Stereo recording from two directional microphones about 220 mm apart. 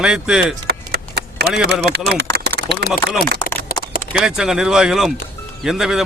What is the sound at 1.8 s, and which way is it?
Speech, 50° right (ahead or behind).